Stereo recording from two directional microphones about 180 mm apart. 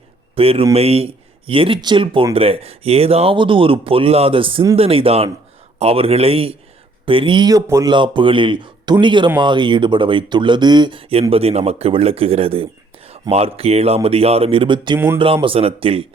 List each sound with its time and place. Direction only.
0.3 s a man's voice: 30° right (ahead or behind)
14.9 s speech: 15° right (ahead or behind)
15.2 s a man's voice: 30° right (ahead or behind)